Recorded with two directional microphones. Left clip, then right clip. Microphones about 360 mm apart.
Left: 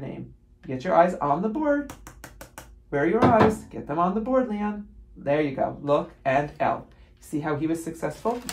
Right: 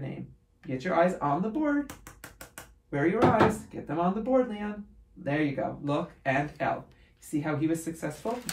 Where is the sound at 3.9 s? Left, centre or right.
Centre.